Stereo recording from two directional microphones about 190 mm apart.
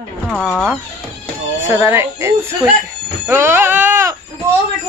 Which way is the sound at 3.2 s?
10° right (ahead or behind).